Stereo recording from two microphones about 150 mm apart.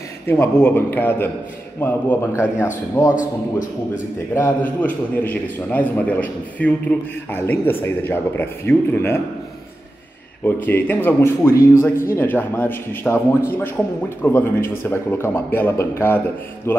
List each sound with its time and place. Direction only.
0.3 s speech: 15° left (ahead or behind)
3.2 s a man's voice: 60° left (ahead or behind)
4.4 s speech: 10° left (ahead or behind)
10.4 s speech: 15° left (ahead or behind)